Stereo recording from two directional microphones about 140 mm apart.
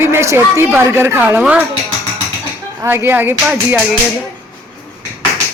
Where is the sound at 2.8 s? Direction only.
15° right (ahead or behind).